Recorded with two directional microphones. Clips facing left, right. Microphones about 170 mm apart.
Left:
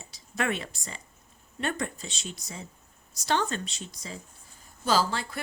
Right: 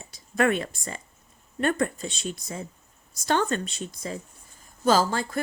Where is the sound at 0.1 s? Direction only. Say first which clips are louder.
Right 7 dB; 50° right (ahead or behind).